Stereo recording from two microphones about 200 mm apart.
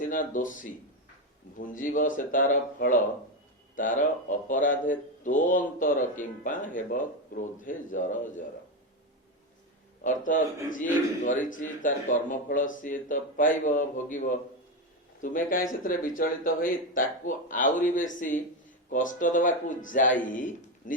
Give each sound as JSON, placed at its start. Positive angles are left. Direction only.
{"t": 0.0, "sound": "speech", "side_deg": 45}
{"t": 10.0, "sound": "speech", "side_deg": 40}